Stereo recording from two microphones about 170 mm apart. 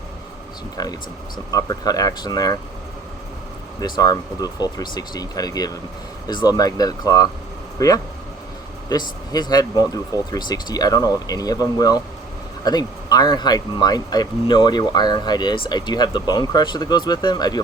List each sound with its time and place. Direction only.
0.8 s speech: 20° left (ahead or behind)
3.8 s speech: 25° left (ahead or behind)